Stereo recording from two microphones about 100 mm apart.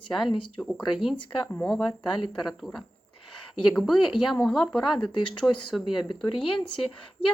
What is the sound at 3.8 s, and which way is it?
A woman's voice, centre (ahead or behind).